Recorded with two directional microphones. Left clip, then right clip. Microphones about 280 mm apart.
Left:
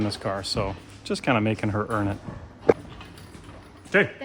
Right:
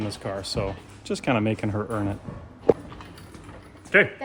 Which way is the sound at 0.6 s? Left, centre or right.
Centre.